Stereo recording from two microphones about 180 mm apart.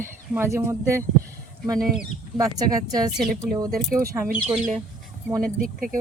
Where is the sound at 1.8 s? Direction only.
Centre (ahead or behind).